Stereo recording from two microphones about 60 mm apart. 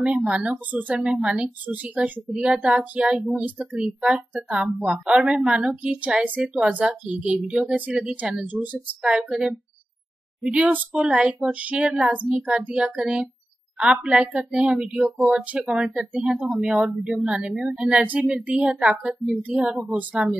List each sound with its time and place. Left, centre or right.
0.0 s a woman's voice: centre
8.4 s a woman's voice: right
9.0 s a woman's voice: centre
15.5 s a woman's voice: centre